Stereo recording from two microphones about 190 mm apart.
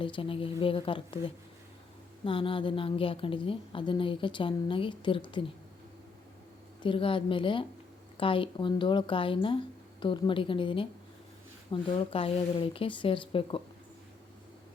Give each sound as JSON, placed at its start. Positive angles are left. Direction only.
{"t": 0.0, "sound": "a woman's voice", "side_deg": 30}
{"t": 6.8, "sound": "a woman's voice", "side_deg": 25}